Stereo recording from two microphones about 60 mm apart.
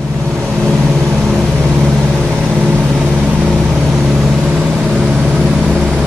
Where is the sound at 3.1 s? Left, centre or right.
Centre.